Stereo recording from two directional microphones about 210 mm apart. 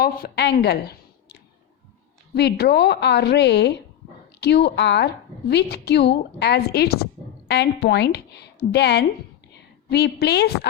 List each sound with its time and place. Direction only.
0.0 s a woman's voice: 50° left (ahead or behind)